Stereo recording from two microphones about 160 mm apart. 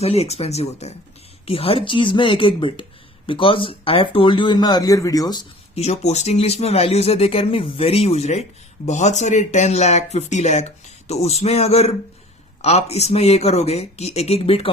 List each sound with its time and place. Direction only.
0.0 s speech: 40° left (ahead or behind); by 5.4 s 25° left (ahead or behind)
5.7 s speech: 40° left (ahead or behind)